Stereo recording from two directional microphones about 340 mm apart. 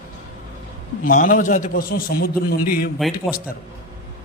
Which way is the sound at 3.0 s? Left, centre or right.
Centre.